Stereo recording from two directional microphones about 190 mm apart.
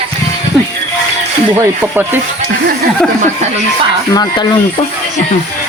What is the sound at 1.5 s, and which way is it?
Speech, 10° right (ahead or behind).